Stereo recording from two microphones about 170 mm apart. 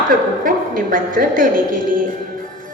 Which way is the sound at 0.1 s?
55° right (ahead or behind).